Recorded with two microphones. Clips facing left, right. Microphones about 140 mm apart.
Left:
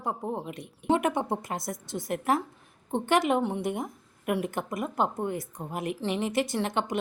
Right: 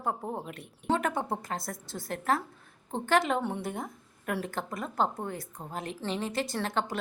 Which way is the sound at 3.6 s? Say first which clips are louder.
Left 5 dB; 15° left (ahead or behind).